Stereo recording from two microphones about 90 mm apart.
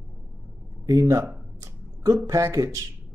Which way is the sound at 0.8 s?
35° right (ahead or behind).